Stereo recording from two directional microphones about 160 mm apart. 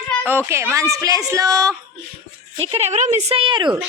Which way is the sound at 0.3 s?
15° right (ahead or behind).